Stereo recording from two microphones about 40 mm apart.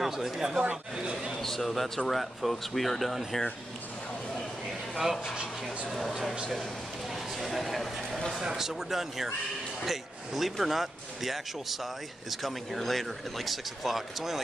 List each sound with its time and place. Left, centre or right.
0.0 s speech: centre
0.6 s speech: right
1.4 s speech: centre
4.9 s speech: centre
7.3 s a sound: centre
8.4 s speech: centre